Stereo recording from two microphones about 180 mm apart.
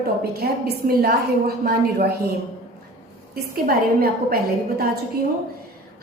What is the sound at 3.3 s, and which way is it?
A woman's voice, 60° right (ahead or behind).